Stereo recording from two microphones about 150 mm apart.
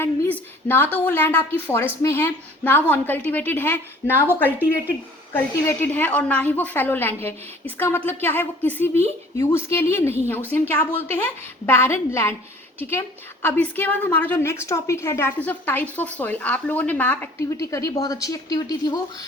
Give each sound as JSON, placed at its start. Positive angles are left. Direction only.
{"t": 0.0, "sound": "a woman's voice", "side_deg": 15}
{"t": 5.3, "sound": "a woman's voice", "side_deg": 15}